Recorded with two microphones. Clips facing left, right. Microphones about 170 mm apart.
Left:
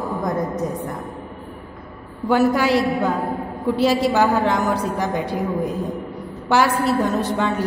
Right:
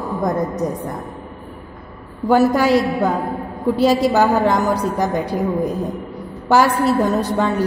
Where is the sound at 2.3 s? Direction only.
40° right (ahead or behind).